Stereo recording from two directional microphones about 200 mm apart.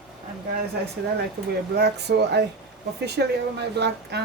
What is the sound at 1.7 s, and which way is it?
Speech, 55° right (ahead or behind).